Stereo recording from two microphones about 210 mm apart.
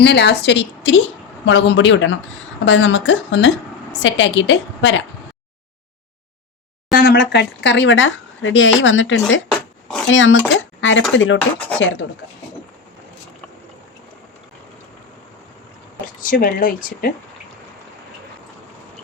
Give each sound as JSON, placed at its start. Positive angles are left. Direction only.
{"t": 0.0, "sound": "speech", "side_deg": 55}
{"t": 6.9, "sound": "speech", "side_deg": 50}
{"t": 10.5, "sound": "a sound", "side_deg": 65}
{"t": 11.1, "sound": "speech", "side_deg": 65}
{"t": 11.3, "sound": "speech", "side_deg": 5}
{"t": 11.8, "sound": "speech", "side_deg": 60}
{"t": 16.2, "sound": "speech", "side_deg": 40}